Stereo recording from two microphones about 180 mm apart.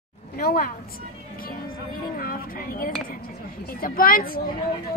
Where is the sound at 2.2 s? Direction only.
50° left (ahead or behind).